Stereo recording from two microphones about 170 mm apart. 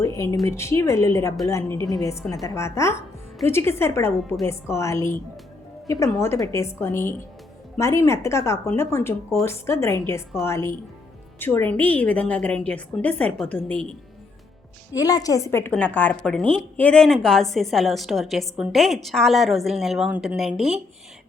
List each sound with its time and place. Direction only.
0.0 s a sound: 20° left (ahead or behind)
0.4 s a woman's voice: 15° left (ahead or behind)
14.9 s a woman's voice: 20° left (ahead or behind); by 20.7 s centre (ahead or behind)